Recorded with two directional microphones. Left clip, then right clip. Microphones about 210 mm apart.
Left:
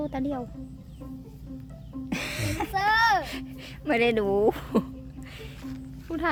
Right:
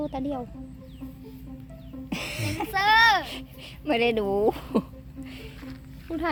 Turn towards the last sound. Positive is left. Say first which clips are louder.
# left 1 dB
turn(degrees=0)  # may be behind; listen again after turning